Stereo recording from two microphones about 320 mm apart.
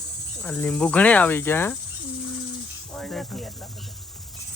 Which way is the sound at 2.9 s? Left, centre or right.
Centre.